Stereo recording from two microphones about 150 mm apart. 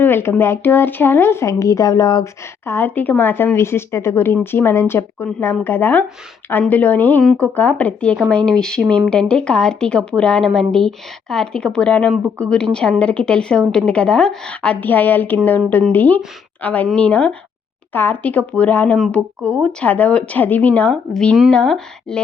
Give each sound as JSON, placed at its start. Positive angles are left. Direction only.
{"t": 0.0, "sound": "a woman's voice", "side_deg": 15}
{"t": 19.4, "sound": "speech", "side_deg": -15}
{"t": 19.8, "sound": "speech", "side_deg": 10}